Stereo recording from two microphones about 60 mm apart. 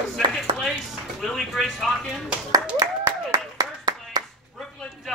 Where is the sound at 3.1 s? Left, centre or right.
Right.